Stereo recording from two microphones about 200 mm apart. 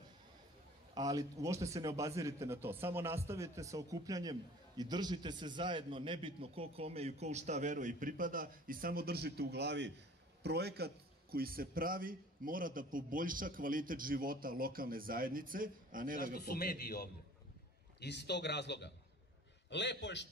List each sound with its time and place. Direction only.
0.9 s a man's voice: 20° right (ahead or behind); by 16.3 s 45° right (ahead or behind)
16.3 s a man's voice: 50° left (ahead or behind)